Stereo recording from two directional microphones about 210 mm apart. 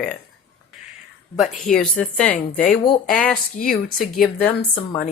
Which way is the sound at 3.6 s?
40° left (ahead or behind).